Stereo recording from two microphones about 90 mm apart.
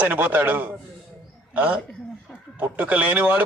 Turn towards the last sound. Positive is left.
turn(degrees=-20)  # may be behind; listen again after turning